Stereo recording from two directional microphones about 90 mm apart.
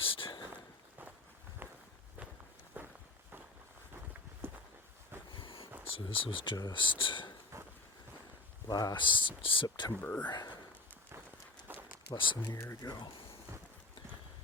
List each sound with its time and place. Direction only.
0.0 s a sound: 85° left
1.6 s walk: 20° right (ahead or behind)
4.4 s walk: 25° right (ahead or behind)
5.3 s a sound: 70° left (ahead or behind)
5.9 s speech: 90° left; by 7.3 s 65° left (ahead or behind)
8.6 s speech: 45° left (ahead or behind); by 9.6 s 75° left (ahead or behind)
9.6 s a sound: 55° left (ahead or behind)
10.0 s speech: 20° left (ahead or behind)
10.2 s speech: 50° left (ahead or behind)
11.7 s a sound: 20° right (ahead or behind)
12.1 s speech: 65° left (ahead or behind)
12.8 s speech: 50° left (ahead or behind)